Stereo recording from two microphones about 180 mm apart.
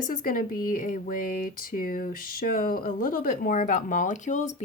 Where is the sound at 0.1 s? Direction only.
50° left (ahead or behind).